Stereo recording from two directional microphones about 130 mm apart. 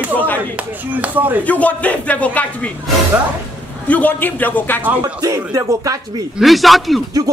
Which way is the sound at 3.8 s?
10° left (ahead or behind).